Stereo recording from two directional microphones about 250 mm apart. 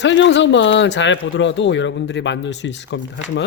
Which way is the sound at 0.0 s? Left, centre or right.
Left.